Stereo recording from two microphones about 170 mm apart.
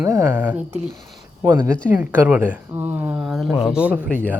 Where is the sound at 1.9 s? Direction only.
10° right (ahead or behind).